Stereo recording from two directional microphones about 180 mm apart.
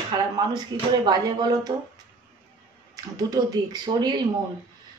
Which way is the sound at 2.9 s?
20° right (ahead or behind).